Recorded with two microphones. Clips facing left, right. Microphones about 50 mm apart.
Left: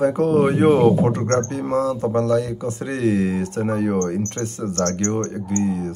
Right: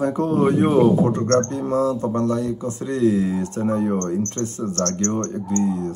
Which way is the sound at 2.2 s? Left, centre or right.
Left.